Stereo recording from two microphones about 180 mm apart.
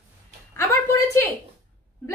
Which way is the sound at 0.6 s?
15° left (ahead or behind).